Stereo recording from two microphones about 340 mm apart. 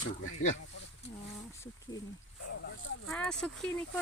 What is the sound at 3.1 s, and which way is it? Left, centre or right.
Speech, centre.